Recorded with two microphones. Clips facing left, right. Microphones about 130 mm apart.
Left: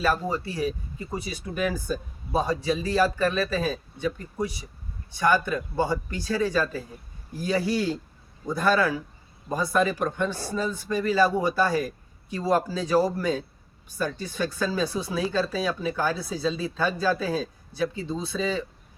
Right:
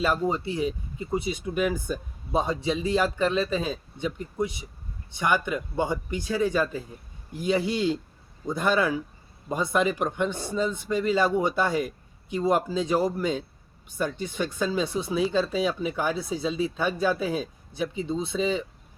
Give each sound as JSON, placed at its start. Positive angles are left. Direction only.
{"t": 0.0, "sound": "speech", "side_deg": -20}